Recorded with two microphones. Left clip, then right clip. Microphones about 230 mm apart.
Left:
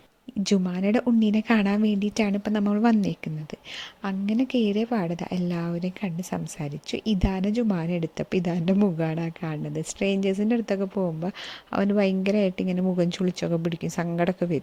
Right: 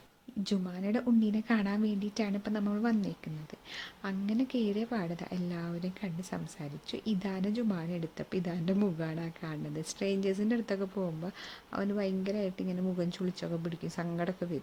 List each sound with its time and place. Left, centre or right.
0.4 s a woman's voice: left